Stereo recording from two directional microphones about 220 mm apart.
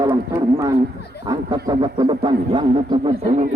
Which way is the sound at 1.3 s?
20° right (ahead or behind).